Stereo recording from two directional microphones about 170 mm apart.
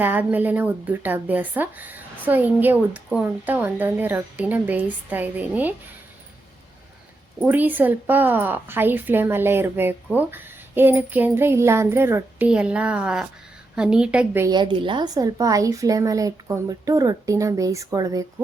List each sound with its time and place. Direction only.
0.0 s a woman's voice: 10° right (ahead or behind)
7.3 s a woman's voice: 10° right (ahead or behind)
14.4 s a woman's voice: 25° right (ahead or behind)